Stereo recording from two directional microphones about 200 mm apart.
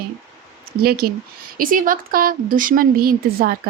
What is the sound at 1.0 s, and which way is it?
Speech, 50° right (ahead or behind).